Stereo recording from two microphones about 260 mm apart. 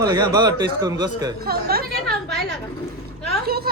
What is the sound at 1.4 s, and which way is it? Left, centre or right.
Speech, right.